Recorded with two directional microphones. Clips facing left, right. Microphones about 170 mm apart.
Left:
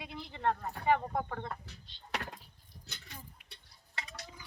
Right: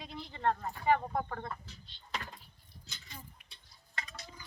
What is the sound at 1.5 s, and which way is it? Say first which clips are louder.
Speech: left 1 dB; 65° left (ahead or behind).